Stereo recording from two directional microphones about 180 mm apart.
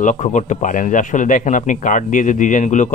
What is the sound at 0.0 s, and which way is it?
Speech, 45° left (ahead or behind).